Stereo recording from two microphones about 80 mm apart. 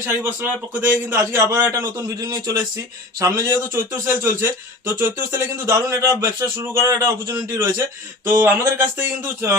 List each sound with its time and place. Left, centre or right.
0.0 s speech: right
1.5 s a man's voice: right
3.2 s a man's voice: right